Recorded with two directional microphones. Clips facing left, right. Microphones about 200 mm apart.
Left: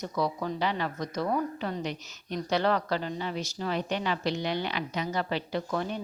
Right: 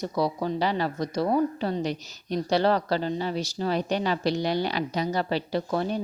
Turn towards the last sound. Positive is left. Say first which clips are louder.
# right 4 dB
turn(degrees=-35)  # may be behind; listen again after turning